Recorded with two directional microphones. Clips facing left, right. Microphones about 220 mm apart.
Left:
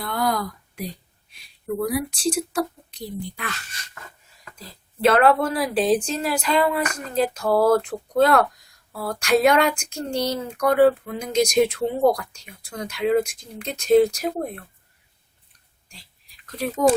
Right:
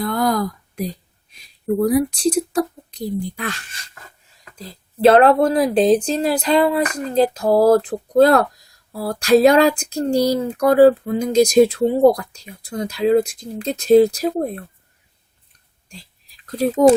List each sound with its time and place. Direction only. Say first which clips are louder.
0.0 s speech: right 5 dB; 45° right (ahead or behind)
16.5 s speech: right 8 dB; 35° right (ahead or behind)